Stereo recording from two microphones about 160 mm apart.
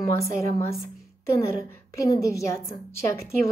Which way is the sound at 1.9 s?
20° left (ahead or behind).